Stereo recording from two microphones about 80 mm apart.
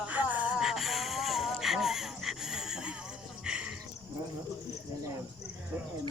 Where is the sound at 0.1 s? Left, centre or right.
Centre.